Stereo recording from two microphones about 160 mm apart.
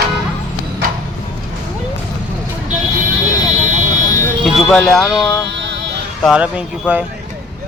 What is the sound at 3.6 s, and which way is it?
Vehicle, 50° right (ahead or behind).